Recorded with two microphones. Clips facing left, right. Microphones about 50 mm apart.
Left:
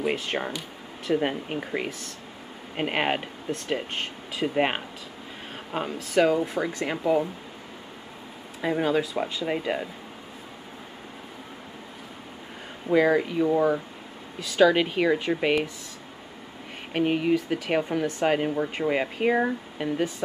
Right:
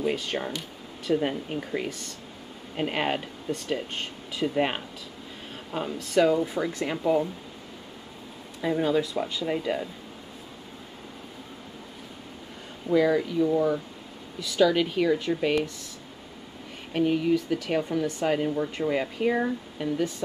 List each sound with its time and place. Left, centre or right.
0.0 s speech: left
4.6 s speech: left
8.5 s speech: left
12.9 s speech: left
16.9 s speech: left